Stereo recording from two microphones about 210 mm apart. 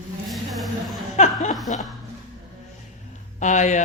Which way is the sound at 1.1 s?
35° left (ahead or behind).